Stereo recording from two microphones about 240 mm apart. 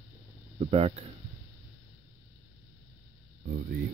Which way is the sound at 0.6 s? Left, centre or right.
Right.